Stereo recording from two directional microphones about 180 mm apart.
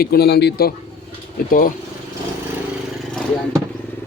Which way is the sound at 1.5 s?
50° left (ahead or behind).